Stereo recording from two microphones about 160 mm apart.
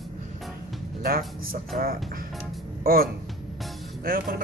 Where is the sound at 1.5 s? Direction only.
65° right (ahead or behind).